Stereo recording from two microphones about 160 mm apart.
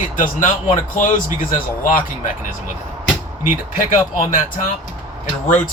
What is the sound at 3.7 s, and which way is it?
Speech, 60° left (ahead or behind).